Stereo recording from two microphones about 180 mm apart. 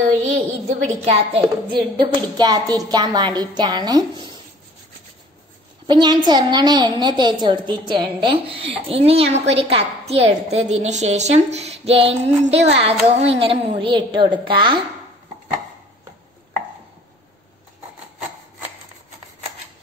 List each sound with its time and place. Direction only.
0.2 s a woman's voice: 40° right (ahead or behind); by 4.4 s 25° right (ahead or behind)
5.9 s a woman's voice: 25° right (ahead or behind)